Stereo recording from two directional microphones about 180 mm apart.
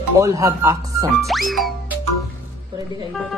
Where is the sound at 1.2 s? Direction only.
Centre (ahead or behind).